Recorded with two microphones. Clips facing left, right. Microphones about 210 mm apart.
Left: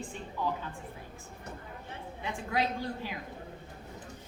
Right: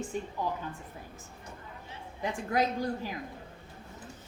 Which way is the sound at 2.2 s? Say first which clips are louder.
Right 3 dB; 45° right (ahead or behind).